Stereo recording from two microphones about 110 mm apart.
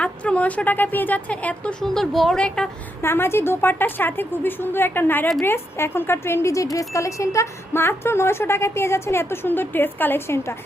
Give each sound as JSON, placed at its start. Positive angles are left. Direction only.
{"t": 0.0, "sound": "speech", "side_deg": 10}
{"t": 3.0, "sound": "speech", "side_deg": 20}